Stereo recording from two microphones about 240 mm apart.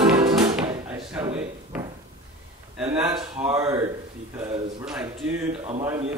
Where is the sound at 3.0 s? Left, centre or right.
Centre.